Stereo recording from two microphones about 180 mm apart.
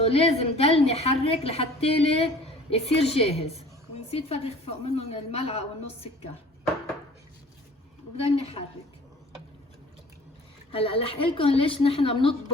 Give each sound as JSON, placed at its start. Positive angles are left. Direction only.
{"t": 0.0, "sound": "a woman's voice", "side_deg": 35}
{"t": 8.1, "sound": "a woman's voice", "side_deg": 35}
{"t": 10.7, "sound": "a woman's voice", "side_deg": 30}